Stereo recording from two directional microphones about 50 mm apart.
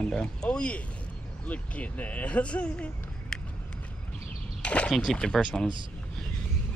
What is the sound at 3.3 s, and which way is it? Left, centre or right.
Run, centre.